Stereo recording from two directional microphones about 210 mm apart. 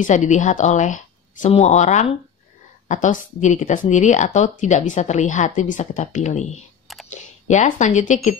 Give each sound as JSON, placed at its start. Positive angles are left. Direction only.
{"t": 0.0, "sound": "speech", "side_deg": 35}